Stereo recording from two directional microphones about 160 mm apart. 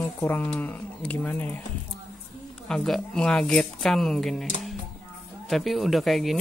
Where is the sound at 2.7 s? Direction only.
5° left (ahead or behind).